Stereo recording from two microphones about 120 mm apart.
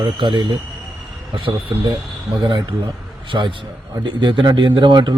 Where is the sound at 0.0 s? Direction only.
45° right (ahead or behind).